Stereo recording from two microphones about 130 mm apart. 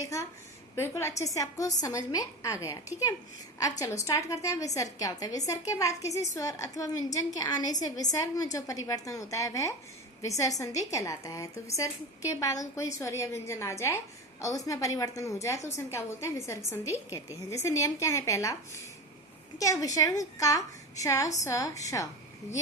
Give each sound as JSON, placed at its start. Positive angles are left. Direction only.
{"t": 0.0, "sound": "a woman's voice", "side_deg": 25}
{"t": 19.5, "sound": "a woman's voice", "side_deg": 25}